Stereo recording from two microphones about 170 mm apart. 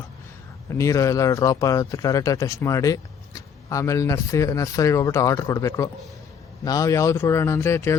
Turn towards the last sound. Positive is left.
turn(degrees=15)  # may be behind; listen again after turning